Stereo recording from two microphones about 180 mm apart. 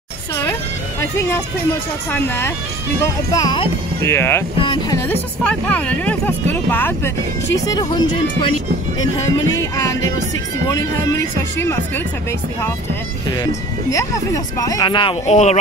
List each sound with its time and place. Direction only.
1.1 s speech: 15° left (ahead or behind)
7.5 s speech: 20° left (ahead or behind)
9.5 s speech: 20° left (ahead or behind)
13.3 s speech: 20° left (ahead or behind)
15.2 s speech: 40° left (ahead or behind)